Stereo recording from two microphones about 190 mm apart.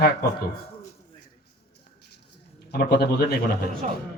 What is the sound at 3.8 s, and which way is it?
Speech, 40° right (ahead or behind).